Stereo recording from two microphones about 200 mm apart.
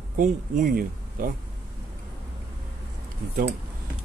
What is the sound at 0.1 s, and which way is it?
Speech, 40° right (ahead or behind).